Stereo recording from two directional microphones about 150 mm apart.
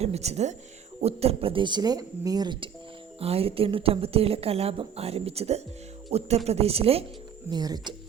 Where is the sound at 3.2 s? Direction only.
40° right (ahead or behind).